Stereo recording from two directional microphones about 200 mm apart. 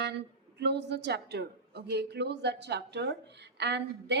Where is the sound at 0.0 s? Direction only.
60° right (ahead or behind).